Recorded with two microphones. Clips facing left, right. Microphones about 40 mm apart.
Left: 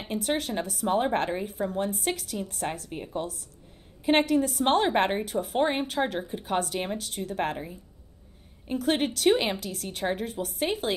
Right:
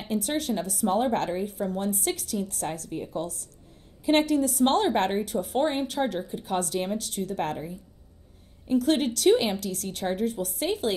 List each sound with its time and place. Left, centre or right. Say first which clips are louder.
0.0 s a woman's voice: right 1 dB; centre
8.6 s speech: right 3 dB; centre